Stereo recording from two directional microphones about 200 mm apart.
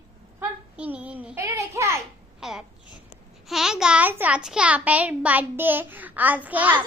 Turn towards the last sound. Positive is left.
turn(degrees=-10)  # may be behind; listen again after turning